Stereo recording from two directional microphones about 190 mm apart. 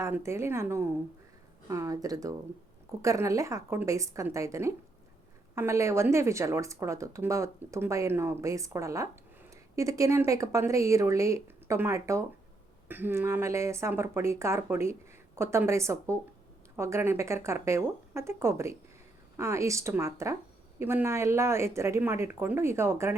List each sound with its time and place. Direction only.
0.0 s speech: 15° right (ahead or behind)